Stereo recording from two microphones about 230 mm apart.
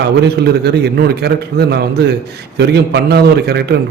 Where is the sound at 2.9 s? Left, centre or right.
Right.